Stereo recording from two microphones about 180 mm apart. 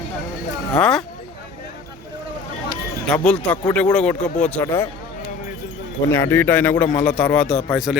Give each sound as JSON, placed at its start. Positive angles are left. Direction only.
{"t": 0.8, "sound": "speech", "side_deg": 5}
{"t": 3.1, "sound": "a man's voice", "side_deg": 5}
{"t": 6.1, "sound": "a man's voice", "side_deg": 15}